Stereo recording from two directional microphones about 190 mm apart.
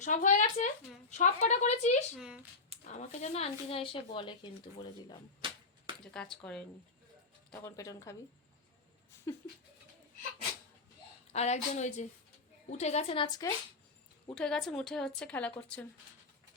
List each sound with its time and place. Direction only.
0.0 s speech: 40° left (ahead or behind)
2.1 s a woman's voice: 5° right (ahead or behind)
2.8 s speech: 40° left (ahead or behind); by 5.1 s 25° left (ahead or behind)
5.4 s a sound: 25° right (ahead or behind)
6.1 s a woman's voice: 5° left (ahead or behind)
7.5 s speech: 15° left (ahead or behind)
9.1 s a sound: 15° left (ahead or behind)
11.3 s speech: 35° left (ahead or behind)
14.3 s a woman's voice: 5° left (ahead or behind)